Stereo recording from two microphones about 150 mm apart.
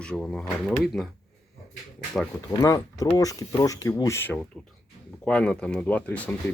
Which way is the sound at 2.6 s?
20° left (ahead or behind).